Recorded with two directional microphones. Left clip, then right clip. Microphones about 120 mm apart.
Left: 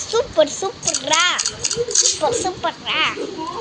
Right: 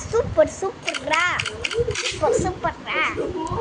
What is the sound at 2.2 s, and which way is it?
Speech, 5° left (ahead or behind).